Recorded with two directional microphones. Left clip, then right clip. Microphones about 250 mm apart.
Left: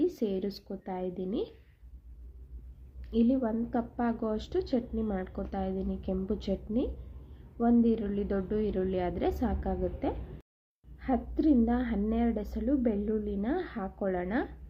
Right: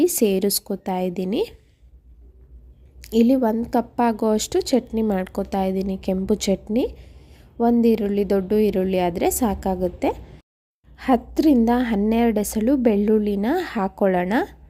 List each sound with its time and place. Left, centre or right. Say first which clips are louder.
0.0 s a woman's voice: right 12 dB; right
3.0 s a woman's voice: right 11 dB; right